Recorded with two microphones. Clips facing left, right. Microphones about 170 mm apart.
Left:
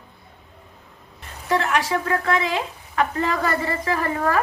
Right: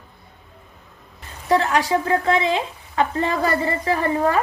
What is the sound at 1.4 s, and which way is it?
Speech, 35° right (ahead or behind).